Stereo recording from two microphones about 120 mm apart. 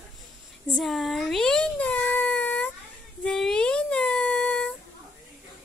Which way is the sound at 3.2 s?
5° left (ahead or behind).